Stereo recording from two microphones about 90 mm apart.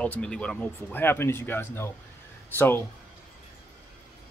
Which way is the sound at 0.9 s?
25° left (ahead or behind).